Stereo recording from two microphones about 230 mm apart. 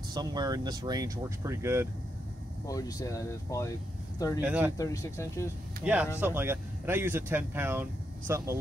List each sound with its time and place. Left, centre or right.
0.1 s speech: centre
2.6 s speech: centre
4.4 s speech: centre
4.7 s speech: centre
5.8 s speech: centre